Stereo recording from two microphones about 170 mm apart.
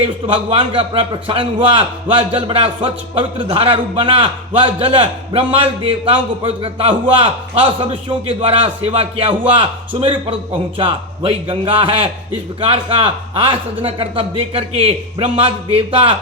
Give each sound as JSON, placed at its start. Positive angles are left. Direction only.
{"t": 0.3, "sound": "a man's voice", "side_deg": -30}